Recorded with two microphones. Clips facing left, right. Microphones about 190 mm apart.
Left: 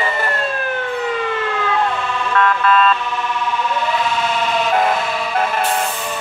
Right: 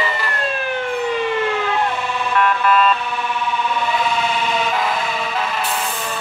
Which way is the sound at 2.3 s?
10° right (ahead or behind).